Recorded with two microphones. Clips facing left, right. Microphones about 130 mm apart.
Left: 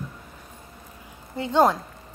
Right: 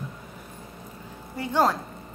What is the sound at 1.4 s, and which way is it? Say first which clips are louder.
Speech: left 3 dB; 20° left (ahead or behind).